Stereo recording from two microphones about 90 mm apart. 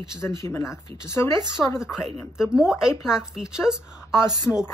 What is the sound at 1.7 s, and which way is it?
Speech, 5° right (ahead or behind).